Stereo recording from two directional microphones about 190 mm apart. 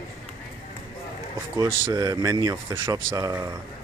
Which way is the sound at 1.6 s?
20° right (ahead or behind).